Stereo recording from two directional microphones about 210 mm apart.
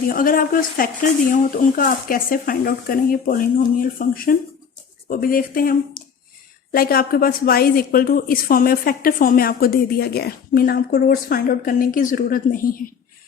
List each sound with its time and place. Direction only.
0.1 s speech: 40° left (ahead or behind)